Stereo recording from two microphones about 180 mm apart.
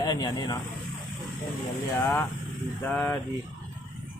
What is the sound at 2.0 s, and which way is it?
Speech, 10° left (ahead or behind).